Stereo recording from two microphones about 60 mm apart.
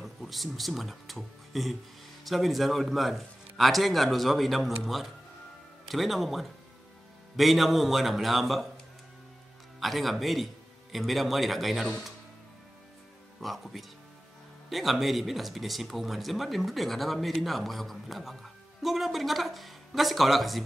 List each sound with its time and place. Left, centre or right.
0.0 s speech: centre
9.8 s a man's voice: centre
13.4 s speech: centre